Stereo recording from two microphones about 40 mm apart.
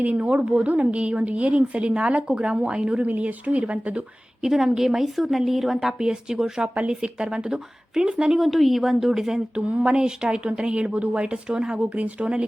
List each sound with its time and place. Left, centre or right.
0.0 s a woman's voice: right
3.2 s a woman's voice: right
4.4 s a woman's voice: centre
6.0 s speech: centre
8.4 s speech: centre
9.6 s a woman's voice: right
10.0 s speech: right
11.9 s a woman's voice: right